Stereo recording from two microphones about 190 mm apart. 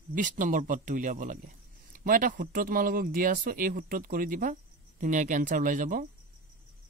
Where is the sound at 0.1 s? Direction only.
45° right (ahead or behind).